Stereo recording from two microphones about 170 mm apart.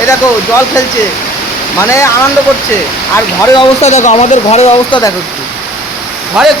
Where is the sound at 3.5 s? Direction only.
40° left (ahead or behind).